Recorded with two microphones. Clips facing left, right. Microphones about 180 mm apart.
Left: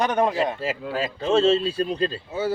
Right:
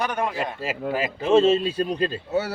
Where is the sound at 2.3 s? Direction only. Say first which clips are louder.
Right 1 dB; 75° right (ahead or behind).